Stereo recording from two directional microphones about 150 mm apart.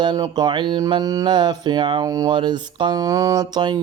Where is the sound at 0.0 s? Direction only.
30° right (ahead or behind).